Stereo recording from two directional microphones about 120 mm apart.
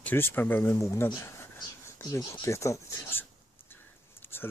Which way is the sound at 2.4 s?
25° left (ahead or behind).